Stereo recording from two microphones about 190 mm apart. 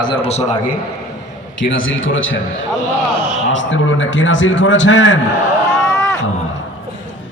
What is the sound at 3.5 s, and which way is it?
A man's voice, 85° left.